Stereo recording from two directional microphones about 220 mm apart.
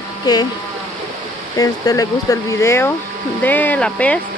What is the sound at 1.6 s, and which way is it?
Speech, 15° left (ahead or behind).